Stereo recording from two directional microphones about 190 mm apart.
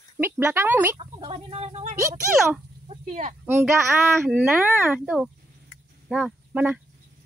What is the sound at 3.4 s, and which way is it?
Speech, 10° right (ahead or behind).